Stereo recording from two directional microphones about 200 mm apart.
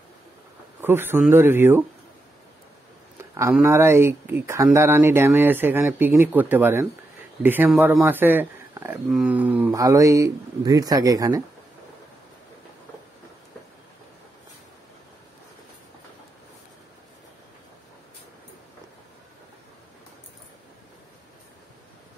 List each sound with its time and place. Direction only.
0.7 s speech: 10° right (ahead or behind)
3.6 s speech: 15° right (ahead or behind)